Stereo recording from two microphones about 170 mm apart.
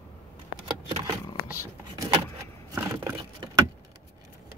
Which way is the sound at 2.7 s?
15° right (ahead or behind).